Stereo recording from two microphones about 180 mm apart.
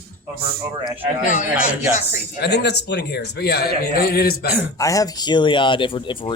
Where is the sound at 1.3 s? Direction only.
45° left (ahead or behind).